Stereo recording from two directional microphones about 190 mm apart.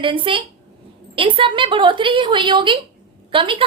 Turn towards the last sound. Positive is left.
turn(degrees=-25)  # may be behind; listen again after turning